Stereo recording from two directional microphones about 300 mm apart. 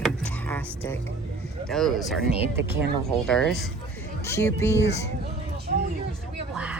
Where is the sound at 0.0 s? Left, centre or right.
Centre.